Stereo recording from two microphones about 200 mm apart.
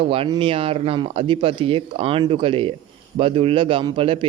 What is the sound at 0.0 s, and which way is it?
Speech, 25° right (ahead or behind).